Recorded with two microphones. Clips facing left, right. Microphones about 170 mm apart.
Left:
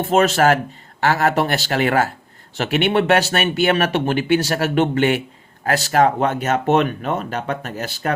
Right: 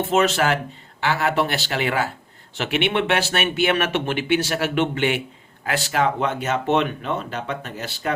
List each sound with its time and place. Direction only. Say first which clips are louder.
0.1 s speech: left 6 dB; 45° left (ahead or behind)